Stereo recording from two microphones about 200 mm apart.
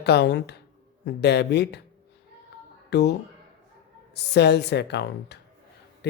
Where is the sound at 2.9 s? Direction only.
55° left (ahead or behind).